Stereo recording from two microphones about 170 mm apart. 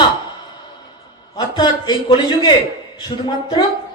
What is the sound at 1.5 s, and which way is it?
Speech, 25° left (ahead or behind).